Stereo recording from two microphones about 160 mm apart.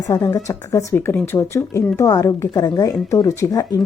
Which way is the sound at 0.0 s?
20° left (ahead or behind).